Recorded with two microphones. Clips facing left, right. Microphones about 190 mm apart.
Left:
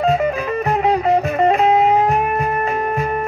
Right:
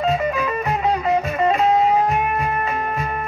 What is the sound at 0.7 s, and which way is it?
Music, 60° left (ahead or behind).